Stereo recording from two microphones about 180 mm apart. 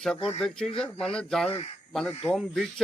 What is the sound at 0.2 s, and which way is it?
Speech, 30° left (ahead or behind).